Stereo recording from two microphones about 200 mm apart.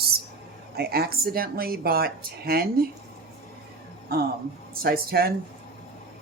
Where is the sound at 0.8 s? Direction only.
50° right (ahead or behind).